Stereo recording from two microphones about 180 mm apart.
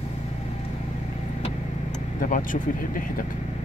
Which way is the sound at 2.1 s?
45° left (ahead or behind).